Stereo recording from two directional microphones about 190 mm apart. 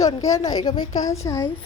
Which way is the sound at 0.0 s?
20° left (ahead or behind).